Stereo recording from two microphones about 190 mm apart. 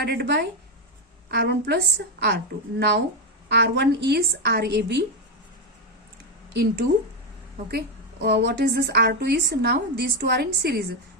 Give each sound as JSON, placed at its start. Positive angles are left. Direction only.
{"t": 0.0, "sound": "a woman's voice", "side_deg": -60}
{"t": 7.7, "sound": "a woman's voice", "side_deg": -60}